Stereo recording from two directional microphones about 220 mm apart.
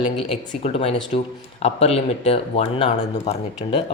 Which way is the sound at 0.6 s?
25° left (ahead or behind).